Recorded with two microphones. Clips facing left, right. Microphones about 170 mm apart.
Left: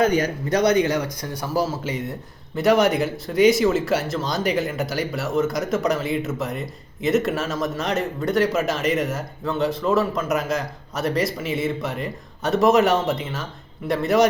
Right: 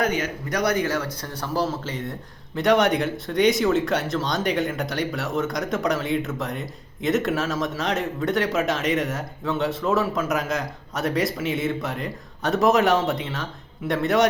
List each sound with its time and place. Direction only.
0.0 s speech: 30° left (ahead or behind)
0.6 s speech: 20° left (ahead or behind); by 14.3 s centre (ahead or behind)